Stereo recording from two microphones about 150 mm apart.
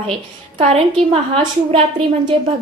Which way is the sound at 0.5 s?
40° right (ahead or behind).